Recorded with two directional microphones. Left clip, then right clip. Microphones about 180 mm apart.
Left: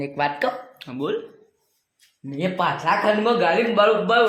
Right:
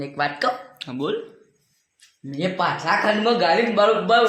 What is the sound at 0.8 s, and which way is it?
Speech, 15° right (ahead or behind).